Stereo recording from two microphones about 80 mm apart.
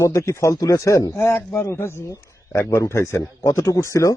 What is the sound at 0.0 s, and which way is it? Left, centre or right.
Speech, left.